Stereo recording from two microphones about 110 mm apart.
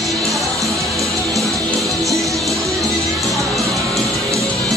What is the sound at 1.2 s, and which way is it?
Music, 30° right (ahead or behind).